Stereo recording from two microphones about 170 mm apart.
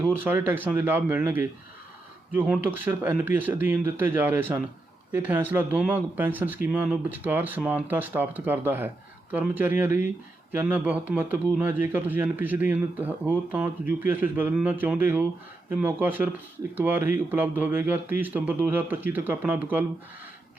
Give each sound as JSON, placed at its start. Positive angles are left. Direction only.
{"t": 0.0, "sound": "speech", "side_deg": -10}